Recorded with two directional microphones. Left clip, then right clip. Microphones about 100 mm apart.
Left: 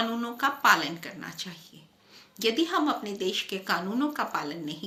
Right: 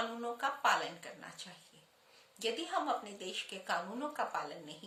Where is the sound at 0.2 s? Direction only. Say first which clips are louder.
Left 8 dB; 30° right (ahead or behind).